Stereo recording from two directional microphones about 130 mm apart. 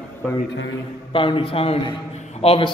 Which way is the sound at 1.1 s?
40° left (ahead or behind).